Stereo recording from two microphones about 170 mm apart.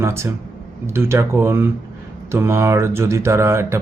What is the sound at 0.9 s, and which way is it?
Speech, 15° right (ahead or behind).